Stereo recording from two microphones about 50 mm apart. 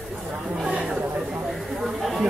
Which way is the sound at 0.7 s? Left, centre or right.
Right.